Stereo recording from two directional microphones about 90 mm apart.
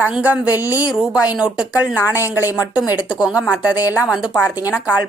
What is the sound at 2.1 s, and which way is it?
A woman's voice, 25° right (ahead or behind).